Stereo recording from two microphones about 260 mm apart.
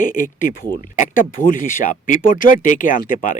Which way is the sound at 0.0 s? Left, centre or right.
Left.